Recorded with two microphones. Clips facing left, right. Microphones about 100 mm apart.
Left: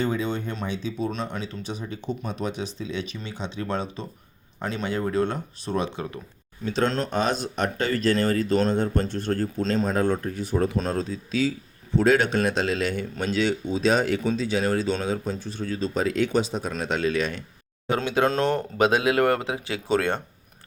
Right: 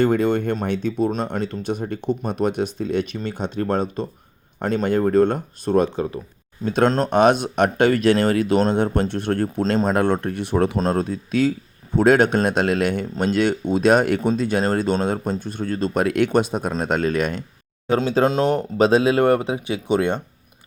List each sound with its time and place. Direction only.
0.0 s speech: 60° right (ahead or behind)
7.1 s speech: 60° right (ahead or behind)
10.9 s speech: 55° right (ahead or behind)
17.9 s speech: 35° right (ahead or behind)